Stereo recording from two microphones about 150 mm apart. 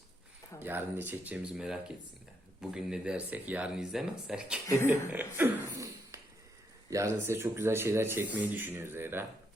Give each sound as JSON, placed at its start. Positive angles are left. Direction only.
{"t": 0.6, "sound": "speech", "side_deg": -15}
{"t": 5.1, "sound": "a sound", "side_deg": -15}
{"t": 6.9, "sound": "speech", "side_deg": -20}